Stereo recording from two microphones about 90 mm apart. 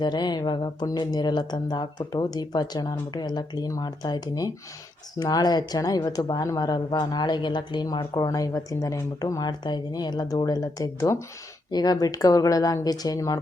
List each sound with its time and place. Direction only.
0.0 s a woman's voice: 55° left (ahead or behind)
6.7 s a woman's voice: 50° left (ahead or behind); by 11.2 s 35° left (ahead or behind)
11.7 s a woman's voice: 50° left (ahead or behind)